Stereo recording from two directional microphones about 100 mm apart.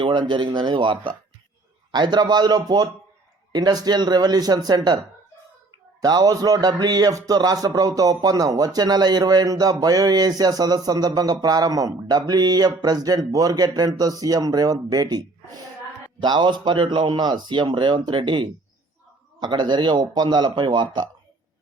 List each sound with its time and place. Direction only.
0.0 s a man's voice: 55° right (ahead or behind)
6.0 s a man's voice: 40° right (ahead or behind)
16.2 s a man's voice: 50° right (ahead or behind)